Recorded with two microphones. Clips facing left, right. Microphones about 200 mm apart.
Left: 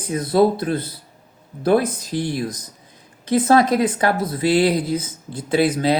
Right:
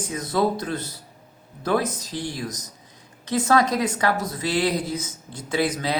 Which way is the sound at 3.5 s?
30° left (ahead or behind).